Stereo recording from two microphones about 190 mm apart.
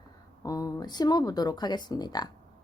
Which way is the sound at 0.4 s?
20° left (ahead or behind).